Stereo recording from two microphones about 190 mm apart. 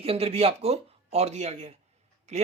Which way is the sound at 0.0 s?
30° right (ahead or behind).